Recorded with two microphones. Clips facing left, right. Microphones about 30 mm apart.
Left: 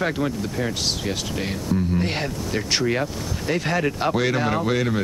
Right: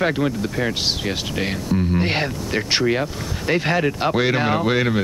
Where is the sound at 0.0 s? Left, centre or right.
Right.